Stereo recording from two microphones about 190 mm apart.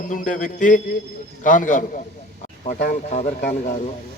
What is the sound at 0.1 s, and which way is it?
Music, 40° left (ahead or behind).